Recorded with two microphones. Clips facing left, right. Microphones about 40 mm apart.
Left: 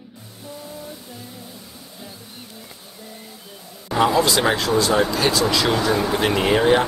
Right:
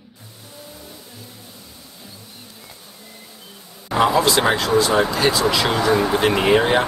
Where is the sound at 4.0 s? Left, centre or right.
Centre.